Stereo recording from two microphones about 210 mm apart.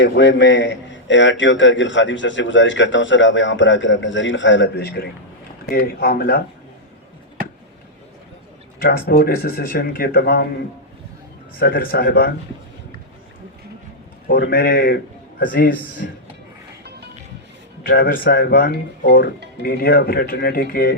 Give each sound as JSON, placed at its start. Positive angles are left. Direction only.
{"t": 0.0, "sound": "a man's voice", "side_deg": 60}
{"t": 8.8, "sound": "speech", "side_deg": 45}
{"t": 11.6, "sound": "speech", "side_deg": 45}
{"t": 14.3, "sound": "a man's voice", "side_deg": 45}
{"t": 17.8, "sound": "speech", "side_deg": 45}